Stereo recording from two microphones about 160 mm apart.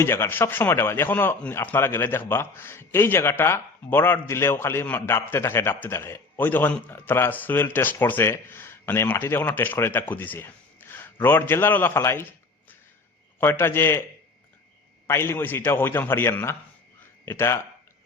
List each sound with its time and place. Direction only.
0.0 s a man's voice: 15° left (ahead or behind)
13.4 s a man's voice: 15° left (ahead or behind)
15.0 s a man's voice: 15° left (ahead or behind)